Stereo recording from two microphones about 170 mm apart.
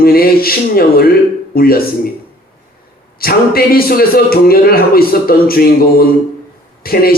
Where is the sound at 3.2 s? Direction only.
60° left (ahead or behind).